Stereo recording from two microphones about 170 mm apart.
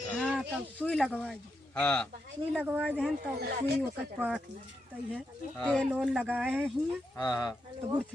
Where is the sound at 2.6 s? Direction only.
10° right (ahead or behind).